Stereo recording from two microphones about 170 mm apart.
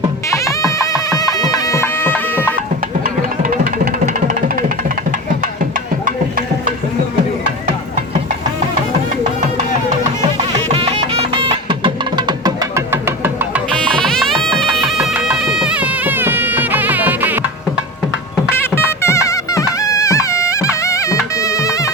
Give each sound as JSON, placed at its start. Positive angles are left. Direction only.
{"t": 0.3, "sound": "music", "side_deg": 20}
{"t": 3.0, "sound": "music", "side_deg": -55}
{"t": 10.3, "sound": "music", "side_deg": -35}
{"t": 13.7, "sound": "music", "side_deg": 5}
{"t": 18.5, "sound": "music", "side_deg": 15}